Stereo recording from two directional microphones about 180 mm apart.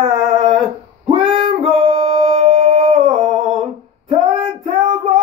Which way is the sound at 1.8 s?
30° right (ahead or behind).